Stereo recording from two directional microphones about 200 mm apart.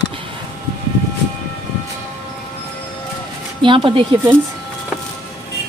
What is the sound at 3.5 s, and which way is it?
Speech, 25° right (ahead or behind).